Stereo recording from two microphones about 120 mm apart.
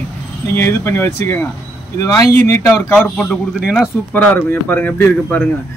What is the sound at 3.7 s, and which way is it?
Speech, 10° left (ahead or behind).